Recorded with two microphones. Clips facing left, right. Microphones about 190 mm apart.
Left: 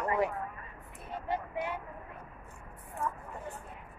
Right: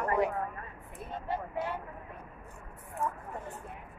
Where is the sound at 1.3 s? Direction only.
15° left (ahead or behind).